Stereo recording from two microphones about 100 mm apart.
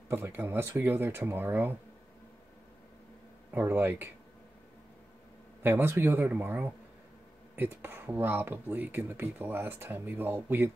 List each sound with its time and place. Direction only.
0.1 s speech: 20° right (ahead or behind)
3.5 s speech: 20° right (ahead or behind)
5.6 s speech: 20° right (ahead or behind)